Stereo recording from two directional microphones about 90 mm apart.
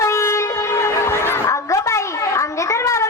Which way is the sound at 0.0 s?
35° left (ahead or behind).